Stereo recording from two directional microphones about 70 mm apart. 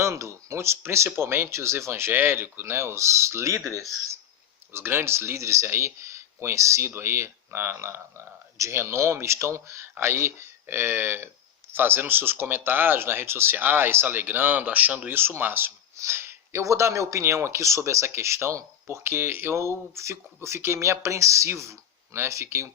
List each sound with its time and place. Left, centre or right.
0.0 s speech: right
4.7 s speech: right